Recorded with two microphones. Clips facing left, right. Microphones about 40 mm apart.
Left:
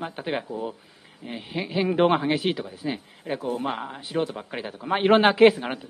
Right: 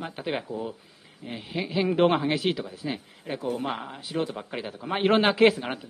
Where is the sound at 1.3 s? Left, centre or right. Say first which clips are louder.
Left 1 dB; centre.